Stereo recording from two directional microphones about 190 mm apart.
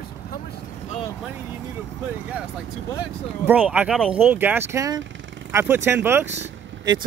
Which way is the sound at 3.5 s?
10° right (ahead or behind).